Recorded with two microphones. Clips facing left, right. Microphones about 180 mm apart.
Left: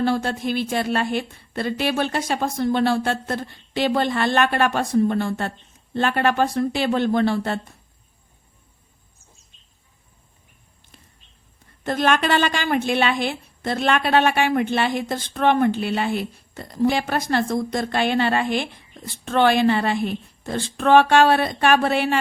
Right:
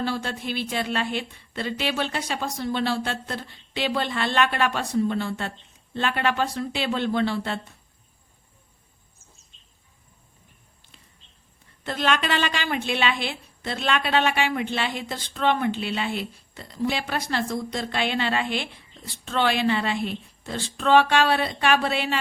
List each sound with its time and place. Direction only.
0.0 s a woman's voice: 45° left (ahead or behind)
11.8 s a woman's voice: 45° left (ahead or behind)